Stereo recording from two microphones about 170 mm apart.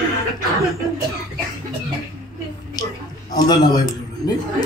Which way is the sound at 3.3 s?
25° left (ahead or behind).